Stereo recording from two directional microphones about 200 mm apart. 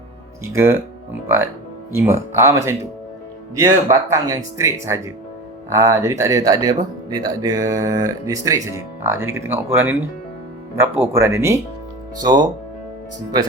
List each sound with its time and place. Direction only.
0.4 s speech: 10° right (ahead or behind)
2.0 s speech: 15° right (ahead or behind)
3.8 s speech: 15° right (ahead or behind)